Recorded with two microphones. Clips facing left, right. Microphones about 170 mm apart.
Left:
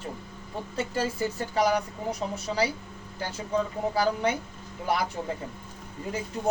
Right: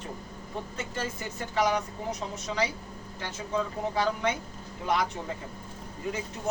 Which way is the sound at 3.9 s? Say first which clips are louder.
Left 2 dB; 35° left (ahead or behind).